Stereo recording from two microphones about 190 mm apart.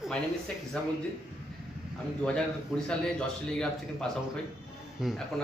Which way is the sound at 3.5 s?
5° left (ahead or behind).